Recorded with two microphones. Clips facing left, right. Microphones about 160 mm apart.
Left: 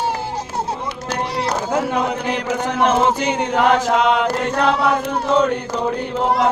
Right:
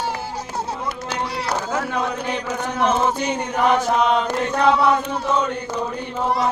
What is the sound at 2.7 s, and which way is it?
Chant, 80° left.